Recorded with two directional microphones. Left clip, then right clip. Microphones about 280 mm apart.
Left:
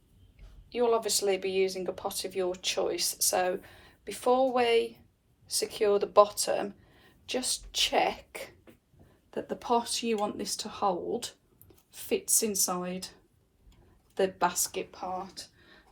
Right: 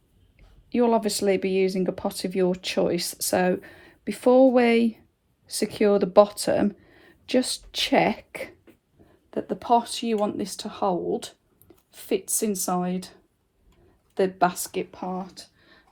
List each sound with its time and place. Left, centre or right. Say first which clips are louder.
0.7 s speech: right 5 dB; right
14.2 s speech: right 5 dB; right